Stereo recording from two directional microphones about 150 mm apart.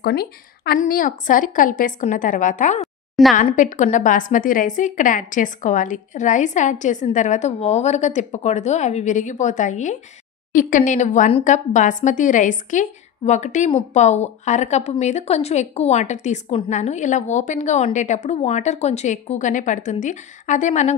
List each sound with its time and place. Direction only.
0.0 s a woman's voice: 90° left; by 2.8 s 60° left (ahead or behind)
3.2 s a woman's voice: centre (ahead or behind)
3.5 s a woman's voice: 55° left (ahead or behind)
16.5 s a woman's voice: 40° left (ahead or behind)